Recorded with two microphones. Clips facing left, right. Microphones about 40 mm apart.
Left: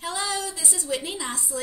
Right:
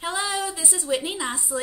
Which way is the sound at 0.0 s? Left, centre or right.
Centre.